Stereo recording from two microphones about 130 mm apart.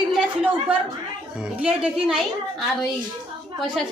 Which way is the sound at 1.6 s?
10° right (ahead or behind).